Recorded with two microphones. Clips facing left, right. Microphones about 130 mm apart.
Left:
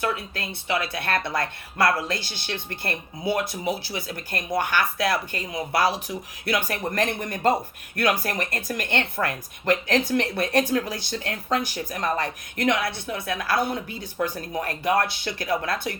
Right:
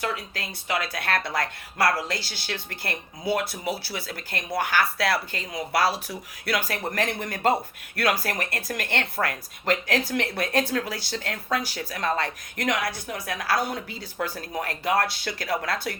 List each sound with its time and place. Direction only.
0.7 s speech: 25° left (ahead or behind)